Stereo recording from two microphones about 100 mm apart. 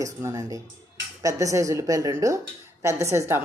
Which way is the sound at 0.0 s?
30° right (ahead or behind).